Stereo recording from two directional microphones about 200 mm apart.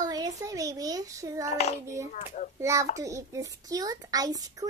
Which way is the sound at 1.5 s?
30° left (ahead or behind).